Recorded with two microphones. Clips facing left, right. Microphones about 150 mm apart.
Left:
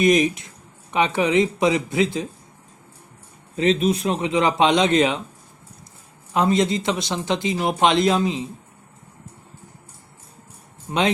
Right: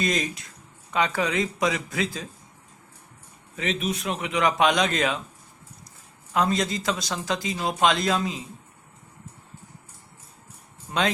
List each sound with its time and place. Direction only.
0.0 s speech: 20° left (ahead or behind)
3.5 s speech: 35° left (ahead or behind)
6.3 s speech: 25° left (ahead or behind)